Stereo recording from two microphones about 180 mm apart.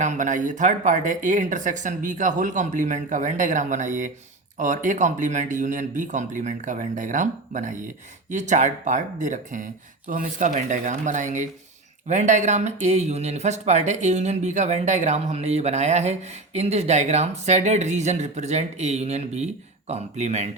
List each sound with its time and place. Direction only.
0.0 s speech: 45° right (ahead or behind)